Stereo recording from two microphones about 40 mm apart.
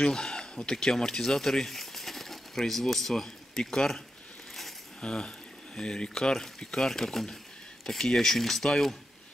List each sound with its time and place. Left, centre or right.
0.0 s speech: centre
5.0 s speech: centre